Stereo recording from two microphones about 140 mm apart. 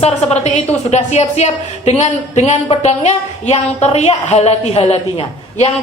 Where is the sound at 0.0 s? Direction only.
50° left (ahead or behind).